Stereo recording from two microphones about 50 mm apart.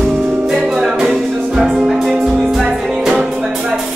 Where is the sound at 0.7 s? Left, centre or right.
Centre.